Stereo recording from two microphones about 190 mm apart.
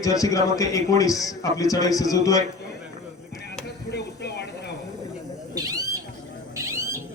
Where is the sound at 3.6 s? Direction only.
60° left (ahead or behind).